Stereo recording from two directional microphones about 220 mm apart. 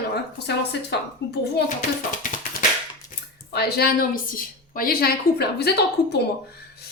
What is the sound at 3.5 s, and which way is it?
A woman's voice, 45° left (ahead or behind).